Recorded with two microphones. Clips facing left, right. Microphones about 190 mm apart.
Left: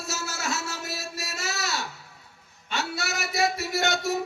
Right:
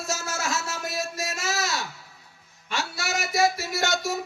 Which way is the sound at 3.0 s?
60° left (ahead or behind).